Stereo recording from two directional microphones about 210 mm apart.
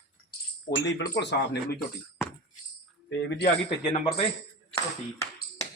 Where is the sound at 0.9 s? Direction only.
55° left (ahead or behind).